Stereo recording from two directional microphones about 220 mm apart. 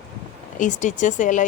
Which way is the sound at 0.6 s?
35° left (ahead or behind).